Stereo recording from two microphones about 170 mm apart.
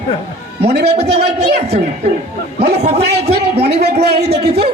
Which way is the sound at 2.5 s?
75° right (ahead or behind).